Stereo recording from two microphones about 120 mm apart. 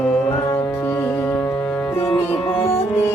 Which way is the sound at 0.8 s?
20° left (ahead or behind).